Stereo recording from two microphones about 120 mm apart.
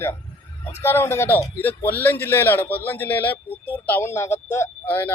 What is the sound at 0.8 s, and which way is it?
Speech, 20° left (ahead or behind).